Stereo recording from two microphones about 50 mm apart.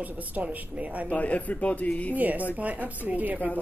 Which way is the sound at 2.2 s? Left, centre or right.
Right.